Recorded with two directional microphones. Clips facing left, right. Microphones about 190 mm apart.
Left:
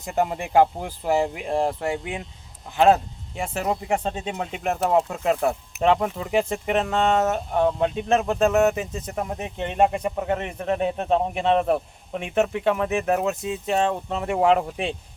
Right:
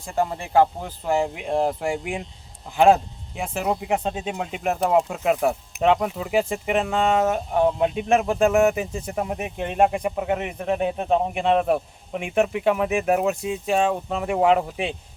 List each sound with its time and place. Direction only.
0.0 s speech: 15° left (ahead or behind); by 14.9 s 5° right (ahead or behind)